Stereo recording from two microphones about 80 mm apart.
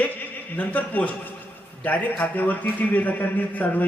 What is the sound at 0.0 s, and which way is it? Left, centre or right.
A man's voice, left.